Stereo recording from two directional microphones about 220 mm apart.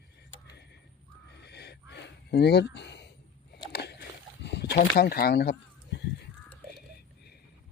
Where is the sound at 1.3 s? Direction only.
50° left (ahead or behind).